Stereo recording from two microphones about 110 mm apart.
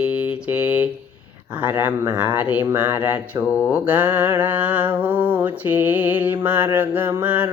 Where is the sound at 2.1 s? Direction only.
15° right (ahead or behind).